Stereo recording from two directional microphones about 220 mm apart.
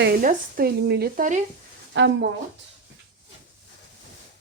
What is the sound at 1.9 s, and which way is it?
Speech, 55° right (ahead or behind).